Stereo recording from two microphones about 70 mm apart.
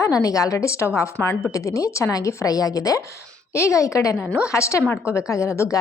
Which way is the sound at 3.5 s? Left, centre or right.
Left.